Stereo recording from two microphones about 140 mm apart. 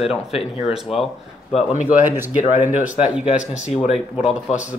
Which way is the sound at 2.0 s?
15° right (ahead or behind).